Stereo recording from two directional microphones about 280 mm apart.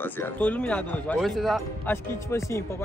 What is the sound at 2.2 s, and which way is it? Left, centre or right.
Speech, centre.